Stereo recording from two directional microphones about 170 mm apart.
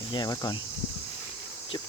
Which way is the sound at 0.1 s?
25° left (ahead or behind).